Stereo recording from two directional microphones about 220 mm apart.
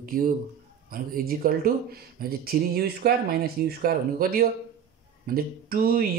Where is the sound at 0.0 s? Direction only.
40° right (ahead or behind).